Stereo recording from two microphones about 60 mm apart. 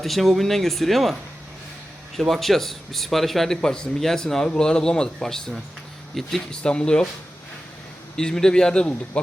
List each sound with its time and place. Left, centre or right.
0.0 s speech: centre
2.1 s speech: centre
6.5 s speech: centre
8.1 s speech: centre